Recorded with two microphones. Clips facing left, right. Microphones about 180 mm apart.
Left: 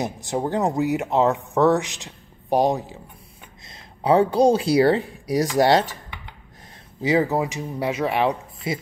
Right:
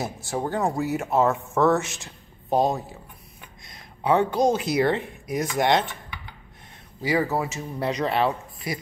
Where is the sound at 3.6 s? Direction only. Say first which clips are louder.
Left 3 dB; 30° left (ahead or behind).